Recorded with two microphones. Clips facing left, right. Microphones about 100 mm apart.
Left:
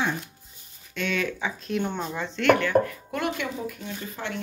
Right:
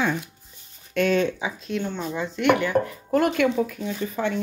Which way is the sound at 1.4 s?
15° right (ahead or behind).